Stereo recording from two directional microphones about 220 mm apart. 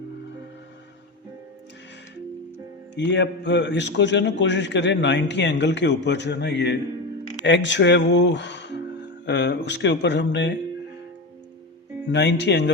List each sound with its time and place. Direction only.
2.9 s a man's voice: 55° left (ahead or behind)
12.1 s a man's voice: 50° left (ahead or behind)